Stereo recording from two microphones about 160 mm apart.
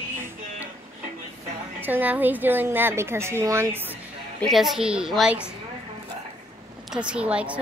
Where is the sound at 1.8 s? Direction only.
10° right (ahead or behind).